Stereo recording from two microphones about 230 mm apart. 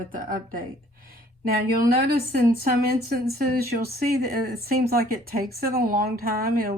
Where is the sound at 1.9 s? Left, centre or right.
Right.